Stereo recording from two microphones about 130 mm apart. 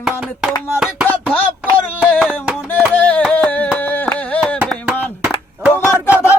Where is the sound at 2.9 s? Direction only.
10° left (ahead or behind).